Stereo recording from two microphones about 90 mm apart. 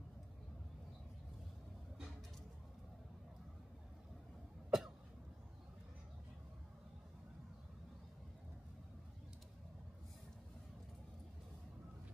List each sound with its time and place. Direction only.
4.6 s cough: 5° right (ahead or behind)